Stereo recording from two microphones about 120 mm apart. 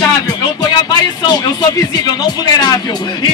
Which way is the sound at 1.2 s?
35° left (ahead or behind).